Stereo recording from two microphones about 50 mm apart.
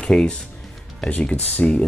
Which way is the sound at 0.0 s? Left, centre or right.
Centre.